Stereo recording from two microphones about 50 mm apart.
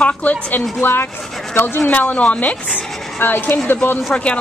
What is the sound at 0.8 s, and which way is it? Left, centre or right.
A woman's voice, left.